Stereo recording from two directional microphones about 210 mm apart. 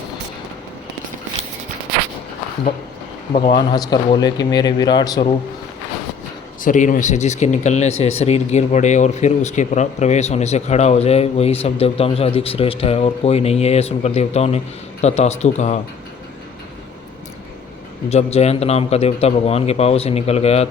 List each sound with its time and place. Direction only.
3.3 s a man's voice: 30° left (ahead or behind)
6.6 s speech: 40° left (ahead or behind)
18.1 s a man's voice: 30° left (ahead or behind)